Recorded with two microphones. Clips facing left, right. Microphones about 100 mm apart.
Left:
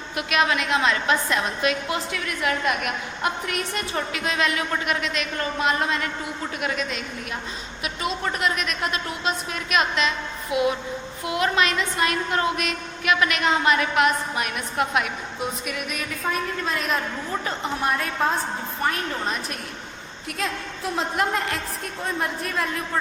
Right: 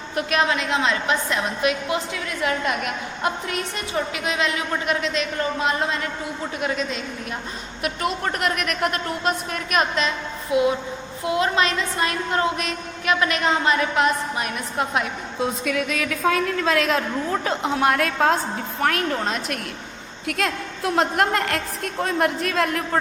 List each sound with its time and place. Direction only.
0.2 s a woman's voice: 35° right (ahead or behind)
3.9 s a woman's voice: 15° right (ahead or behind)
7.8 s a woman's voice: 50° right (ahead or behind)
10.5 s a woman's voice: 25° right (ahead or behind)
15.7 s a woman's voice: 90° right; by 21.6 s 65° right (ahead or behind)
22.0 s a woman's voice: 75° right (ahead or behind)